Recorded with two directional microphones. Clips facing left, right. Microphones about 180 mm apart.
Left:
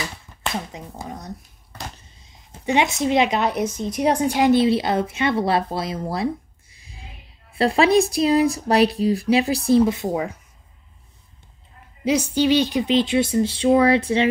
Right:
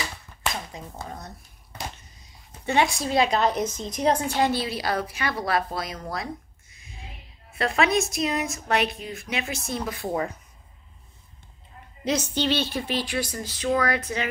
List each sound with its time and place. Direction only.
0.7 s speech: 15° left (ahead or behind)
2.6 s a woman's voice: 15° left (ahead or behind)
12.0 s speech: 10° left (ahead or behind); by 14.2 s 30° left (ahead or behind)